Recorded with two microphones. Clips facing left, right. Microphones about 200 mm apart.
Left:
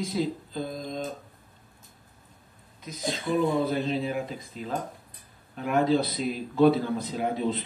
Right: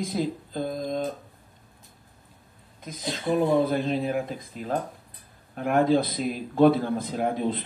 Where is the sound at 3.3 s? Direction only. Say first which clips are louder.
Right 3 dB; 55° right (ahead or behind).